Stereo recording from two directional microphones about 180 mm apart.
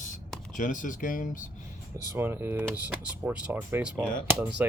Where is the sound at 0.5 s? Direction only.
45° left (ahead or behind).